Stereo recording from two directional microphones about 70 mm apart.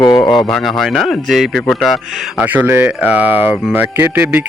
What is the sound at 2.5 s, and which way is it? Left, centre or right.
Speech, right.